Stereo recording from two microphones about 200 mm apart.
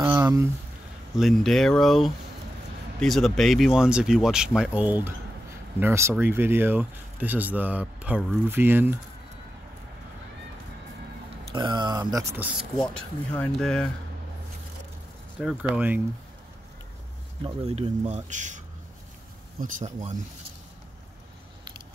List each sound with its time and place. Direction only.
0.0 s a sound: 15° right (ahead or behind)
1.1 s speech: centre (ahead or behind)
11.5 s speech: 20° right (ahead or behind); by 13.8 s 5° left (ahead or behind)
15.3 s speech: 5° right (ahead or behind)
17.4 s speech: 30° right (ahead or behind)